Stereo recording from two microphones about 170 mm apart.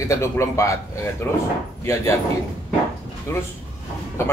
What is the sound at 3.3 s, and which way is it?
Speech, 15° left (ahead or behind).